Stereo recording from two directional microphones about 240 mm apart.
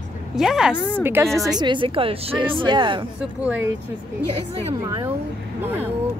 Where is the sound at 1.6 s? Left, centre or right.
Right.